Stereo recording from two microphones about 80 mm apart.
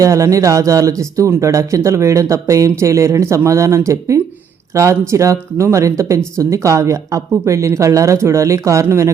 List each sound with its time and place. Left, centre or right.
0.0 s speech: right